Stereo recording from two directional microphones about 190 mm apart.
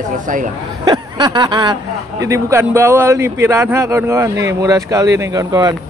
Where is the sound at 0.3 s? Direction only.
45° right (ahead or behind).